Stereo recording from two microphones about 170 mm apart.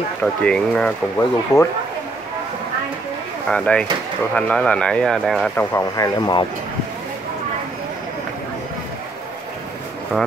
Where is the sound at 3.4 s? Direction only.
5° left (ahead or behind).